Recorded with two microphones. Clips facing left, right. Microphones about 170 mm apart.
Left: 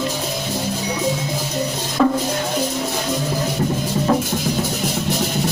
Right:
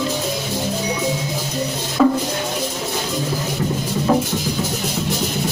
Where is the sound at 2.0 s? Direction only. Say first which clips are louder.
Right 2 dB; 5° right (ahead or behind).